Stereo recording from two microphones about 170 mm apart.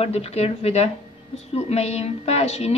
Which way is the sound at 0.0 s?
35° left (ahead or behind).